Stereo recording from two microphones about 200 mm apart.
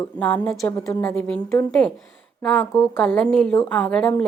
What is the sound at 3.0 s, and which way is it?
A woman's voice, 5° left (ahead or behind).